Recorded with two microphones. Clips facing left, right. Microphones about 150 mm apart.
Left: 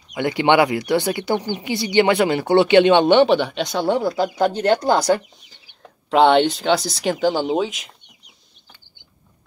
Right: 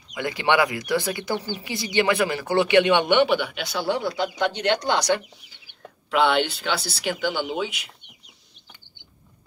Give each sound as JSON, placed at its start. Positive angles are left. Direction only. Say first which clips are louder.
{"t": 0.1, "sound": "speech", "louder": "left 6 dB", "side_deg": 25}